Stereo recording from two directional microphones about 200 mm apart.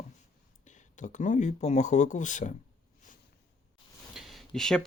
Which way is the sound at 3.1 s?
40° left (ahead or behind).